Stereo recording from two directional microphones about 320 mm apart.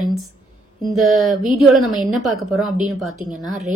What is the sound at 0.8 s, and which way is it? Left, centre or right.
A woman's voice, centre.